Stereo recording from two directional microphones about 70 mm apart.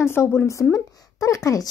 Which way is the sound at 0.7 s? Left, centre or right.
Left.